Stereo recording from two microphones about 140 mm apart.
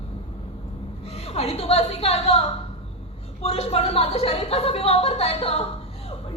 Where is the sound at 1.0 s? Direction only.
45° left (ahead or behind).